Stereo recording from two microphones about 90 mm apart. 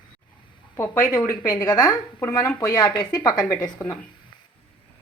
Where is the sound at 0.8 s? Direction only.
35° left (ahead or behind).